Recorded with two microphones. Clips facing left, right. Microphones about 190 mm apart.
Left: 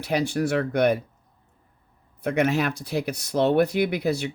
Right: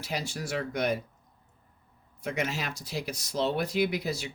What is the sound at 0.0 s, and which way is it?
Speech, 60° left (ahead or behind).